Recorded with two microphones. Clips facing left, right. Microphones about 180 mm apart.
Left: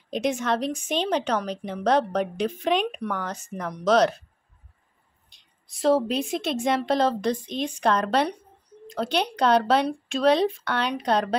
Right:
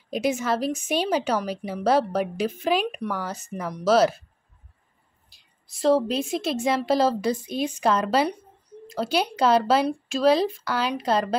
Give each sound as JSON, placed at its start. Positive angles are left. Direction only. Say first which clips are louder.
{"t": 0.1, "sound": "a woman's voice", "louder": "right 1 dB", "side_deg": -5}
{"t": 5.3, "sound": "a woman's voice", "louder": "even", "side_deg": -5}